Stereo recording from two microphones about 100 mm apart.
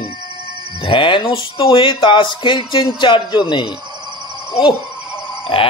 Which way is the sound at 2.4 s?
55° left (ahead or behind).